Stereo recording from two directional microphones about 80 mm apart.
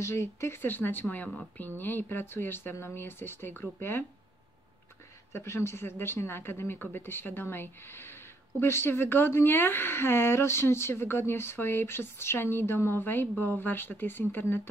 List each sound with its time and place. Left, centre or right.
0.0 s speech: left
5.3 s speech: left